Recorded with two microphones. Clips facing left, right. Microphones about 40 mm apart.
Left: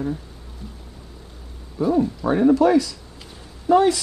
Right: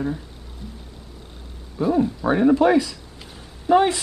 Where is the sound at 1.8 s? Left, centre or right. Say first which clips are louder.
Even; centre.